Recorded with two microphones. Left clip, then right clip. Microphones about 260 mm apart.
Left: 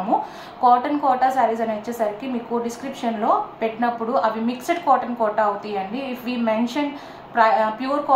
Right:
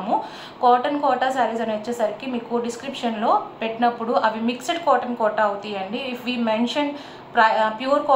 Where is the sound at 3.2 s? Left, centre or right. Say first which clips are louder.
Even; centre.